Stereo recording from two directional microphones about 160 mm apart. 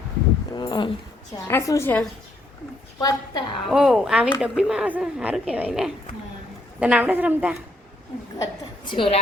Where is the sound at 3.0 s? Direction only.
25° left (ahead or behind).